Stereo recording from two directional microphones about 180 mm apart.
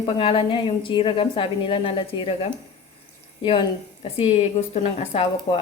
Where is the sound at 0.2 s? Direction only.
30° left (ahead or behind).